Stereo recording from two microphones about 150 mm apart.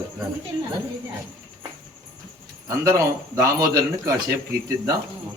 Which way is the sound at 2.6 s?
20° right (ahead or behind).